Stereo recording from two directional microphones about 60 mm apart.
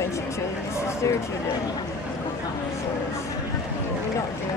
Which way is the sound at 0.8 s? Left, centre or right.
Left.